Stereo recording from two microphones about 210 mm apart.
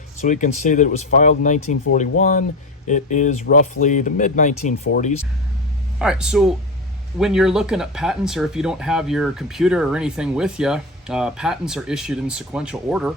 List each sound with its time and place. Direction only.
0.2 s speech: 35° left (ahead or behind)
6.0 s speech: 5° right (ahead or behind)